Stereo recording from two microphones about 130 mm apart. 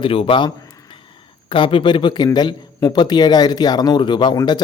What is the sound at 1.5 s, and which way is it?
Speech, 45° left (ahead or behind).